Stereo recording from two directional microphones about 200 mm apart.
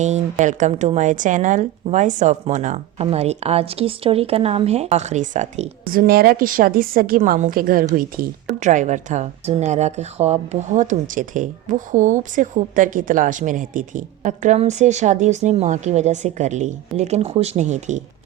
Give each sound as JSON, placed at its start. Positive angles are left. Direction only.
{"t": 0.0, "sound": "a woman's voice", "side_deg": -35}